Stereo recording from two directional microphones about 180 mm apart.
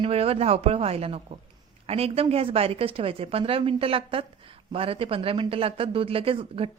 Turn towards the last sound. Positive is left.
turn(degrees=-30)  # may be behind; listen again after turning